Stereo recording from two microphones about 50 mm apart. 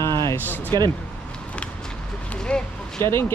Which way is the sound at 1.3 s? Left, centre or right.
Left.